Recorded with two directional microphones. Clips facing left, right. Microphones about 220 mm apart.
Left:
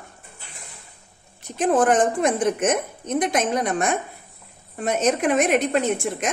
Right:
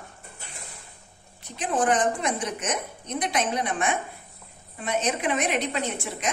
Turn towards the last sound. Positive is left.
turn(degrees=50)  # may be behind; listen again after turning